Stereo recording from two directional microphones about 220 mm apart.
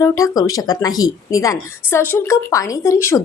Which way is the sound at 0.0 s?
15° left (ahead or behind).